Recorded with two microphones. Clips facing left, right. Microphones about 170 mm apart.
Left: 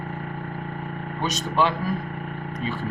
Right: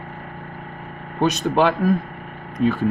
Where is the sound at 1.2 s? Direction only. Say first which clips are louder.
Right 6 dB; 60° right (ahead or behind).